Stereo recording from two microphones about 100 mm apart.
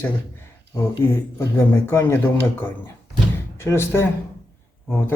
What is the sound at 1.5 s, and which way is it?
Speech, 20° left (ahead or behind).